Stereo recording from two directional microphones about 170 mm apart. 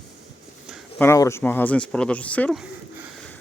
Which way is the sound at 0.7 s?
5° right (ahead or behind).